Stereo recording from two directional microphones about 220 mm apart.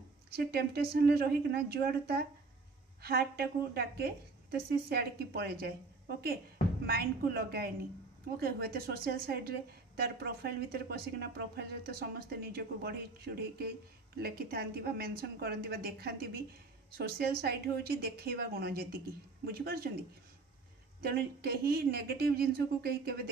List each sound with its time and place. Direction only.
0.3 s speech: 45° right (ahead or behind)
21.0 s speech: 45° right (ahead or behind)